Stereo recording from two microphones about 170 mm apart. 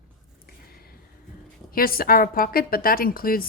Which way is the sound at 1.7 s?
60° left (ahead or behind).